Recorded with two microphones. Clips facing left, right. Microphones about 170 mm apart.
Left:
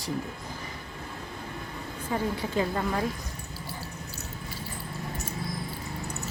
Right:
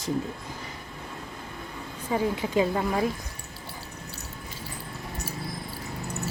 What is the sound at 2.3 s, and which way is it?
Speech, 15° right (ahead or behind).